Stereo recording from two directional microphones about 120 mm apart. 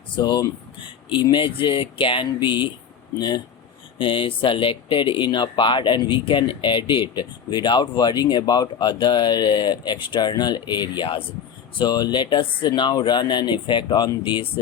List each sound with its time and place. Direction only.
0.2 s speech: 35° left (ahead or behind)